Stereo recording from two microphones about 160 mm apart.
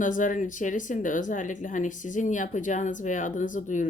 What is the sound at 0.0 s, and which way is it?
Speech, 55° left (ahead or behind).